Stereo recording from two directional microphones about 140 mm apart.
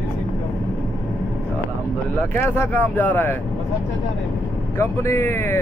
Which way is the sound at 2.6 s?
15° left (ahead or behind).